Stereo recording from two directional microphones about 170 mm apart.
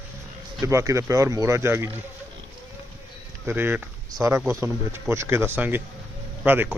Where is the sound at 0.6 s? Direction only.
15° right (ahead or behind).